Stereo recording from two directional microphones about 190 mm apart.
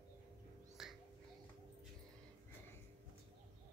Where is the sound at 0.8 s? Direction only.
Centre (ahead or behind).